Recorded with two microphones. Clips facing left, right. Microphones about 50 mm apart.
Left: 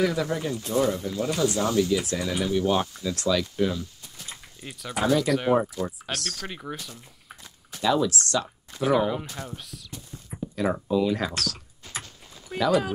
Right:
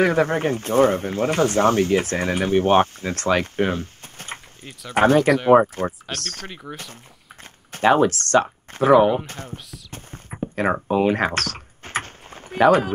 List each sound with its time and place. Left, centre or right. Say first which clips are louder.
0.0 s speech: right 7 dB; right
6.5 s speech: even; centre
7.7 s speech: right 7 dB; right
9.8 s computer keyboard: right 3 dB; right